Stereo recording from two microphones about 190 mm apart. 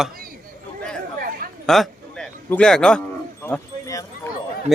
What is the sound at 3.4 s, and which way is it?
Wind chime, 15° left (ahead or behind).